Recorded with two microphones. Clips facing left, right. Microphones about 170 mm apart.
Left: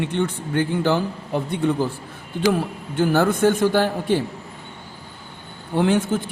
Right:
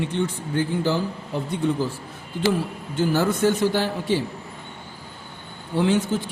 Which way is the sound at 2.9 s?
55° left (ahead or behind).